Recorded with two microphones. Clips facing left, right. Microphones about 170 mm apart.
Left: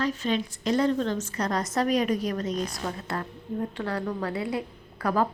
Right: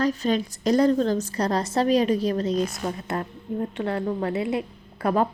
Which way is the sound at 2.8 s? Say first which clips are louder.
Right 4 dB; 20° right (ahead or behind).